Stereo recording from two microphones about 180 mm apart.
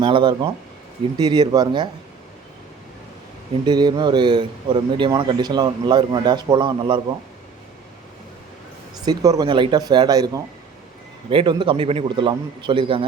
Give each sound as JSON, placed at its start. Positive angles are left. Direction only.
{"t": 0.0, "sound": "speech", "side_deg": -25}
{"t": 3.7, "sound": "speech", "side_deg": -25}
{"t": 9.0, "sound": "speech", "side_deg": -20}